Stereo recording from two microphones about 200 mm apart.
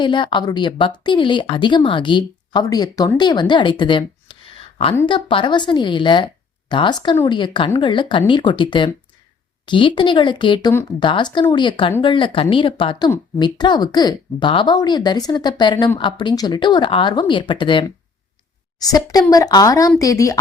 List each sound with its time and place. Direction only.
0.0 s a woman's voice: 25° left (ahead or behind)